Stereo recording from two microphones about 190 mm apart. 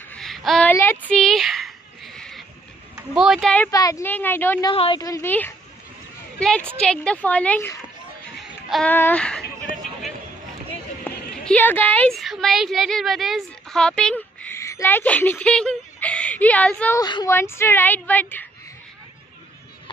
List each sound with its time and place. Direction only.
0.1 s a sound: centre (ahead or behind)
3.0 s speech: centre (ahead or behind)
3.7 s speech: 15° left (ahead or behind)
4.6 s a woman's voice: 25° left (ahead or behind)
6.8 s speech: 5° left (ahead or behind)
8.4 s a sound: centre (ahead or behind)
8.9 s speech: 10° left (ahead or behind)
11.1 s a woman's voice: 10° left (ahead or behind)
17.0 s speech: 20° left (ahead or behind)